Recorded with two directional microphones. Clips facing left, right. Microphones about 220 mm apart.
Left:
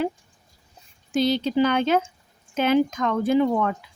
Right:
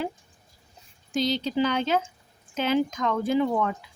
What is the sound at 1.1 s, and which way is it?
A woman's voice, 55° left (ahead or behind).